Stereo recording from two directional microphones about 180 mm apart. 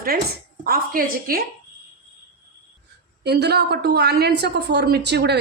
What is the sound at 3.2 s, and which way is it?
A woman's voice, 65° right (ahead or behind).